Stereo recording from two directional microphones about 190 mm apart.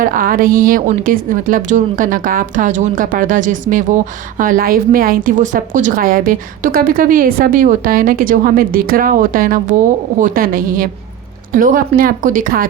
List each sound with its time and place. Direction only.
0.0 s a woman's voice: 45° right (ahead or behind)